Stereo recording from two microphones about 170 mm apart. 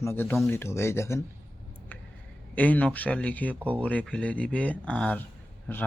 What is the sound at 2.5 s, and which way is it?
Speech, 10° left (ahead or behind).